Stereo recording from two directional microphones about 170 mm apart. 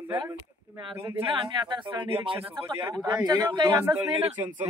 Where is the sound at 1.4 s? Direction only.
30° right (ahead or behind).